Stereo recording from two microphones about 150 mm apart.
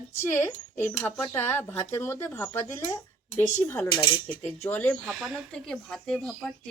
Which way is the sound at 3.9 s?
30° left (ahead or behind).